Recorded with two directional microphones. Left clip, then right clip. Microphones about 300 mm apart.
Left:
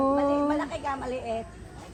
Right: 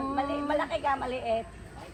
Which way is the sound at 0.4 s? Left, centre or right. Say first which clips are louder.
Even; centre.